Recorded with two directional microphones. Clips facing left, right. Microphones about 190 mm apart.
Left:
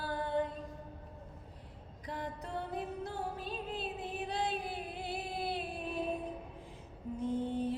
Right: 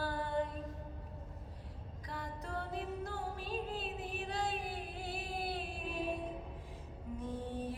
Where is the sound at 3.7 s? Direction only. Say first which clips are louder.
Left 2 dB; 20° left (ahead or behind).